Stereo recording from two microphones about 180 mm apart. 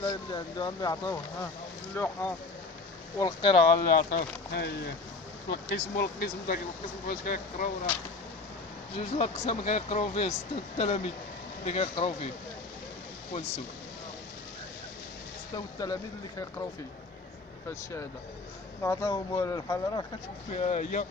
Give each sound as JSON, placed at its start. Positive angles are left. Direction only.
{"t": 0.0, "sound": "speech", "side_deg": 25}
{"t": 3.2, "sound": "speech", "side_deg": 25}
{"t": 3.8, "sound": "speech", "side_deg": 50}
{"t": 9.0, "sound": "speech", "side_deg": 35}
{"t": 15.5, "sound": "speech", "side_deg": 20}
{"t": 18.8, "sound": "speech", "side_deg": 15}
{"t": 20.5, "sound": "speech", "side_deg": 40}